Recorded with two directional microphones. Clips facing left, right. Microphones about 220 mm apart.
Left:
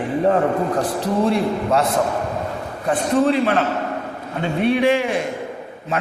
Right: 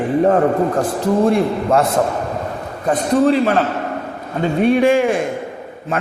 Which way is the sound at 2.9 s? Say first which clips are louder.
Right 3 dB; 40° right (ahead or behind).